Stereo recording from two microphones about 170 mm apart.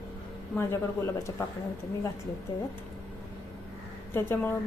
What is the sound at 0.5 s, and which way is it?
Speech, 15° left (ahead or behind).